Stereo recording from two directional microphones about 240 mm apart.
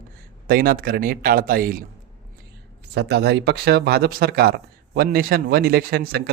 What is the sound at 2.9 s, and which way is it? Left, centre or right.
Speech, right.